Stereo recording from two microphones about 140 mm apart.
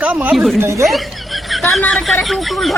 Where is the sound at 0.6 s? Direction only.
20° right (ahead or behind).